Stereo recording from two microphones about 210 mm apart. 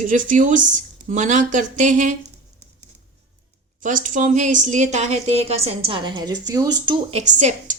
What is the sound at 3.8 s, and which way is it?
A woman's voice, 40° right (ahead or behind).